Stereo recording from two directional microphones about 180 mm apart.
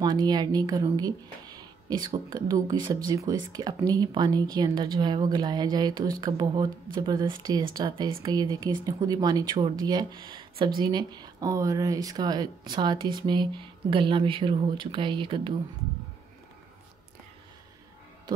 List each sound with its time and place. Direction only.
0.0 s speech: 25° right (ahead or behind)